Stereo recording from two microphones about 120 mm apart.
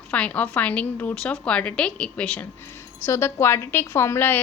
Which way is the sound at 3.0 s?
20° left (ahead or behind).